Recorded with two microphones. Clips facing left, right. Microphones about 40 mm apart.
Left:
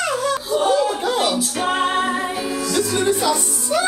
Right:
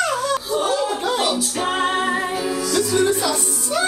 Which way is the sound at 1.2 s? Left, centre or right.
Centre.